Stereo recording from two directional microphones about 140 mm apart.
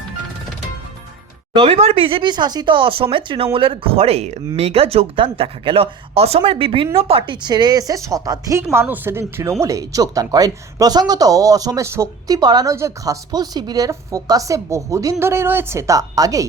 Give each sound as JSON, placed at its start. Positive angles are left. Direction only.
{"t": 1.5, "sound": "speech", "side_deg": -45}